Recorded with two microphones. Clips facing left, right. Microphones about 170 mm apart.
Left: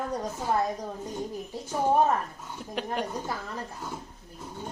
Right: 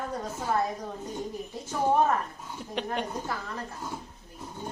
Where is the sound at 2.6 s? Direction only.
5° left (ahead or behind).